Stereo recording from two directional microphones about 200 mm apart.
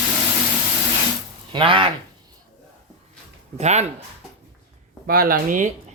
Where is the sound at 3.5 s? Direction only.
35° right (ahead or behind).